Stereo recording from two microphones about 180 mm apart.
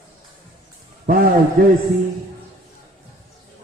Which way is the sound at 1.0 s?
55° right (ahead or behind).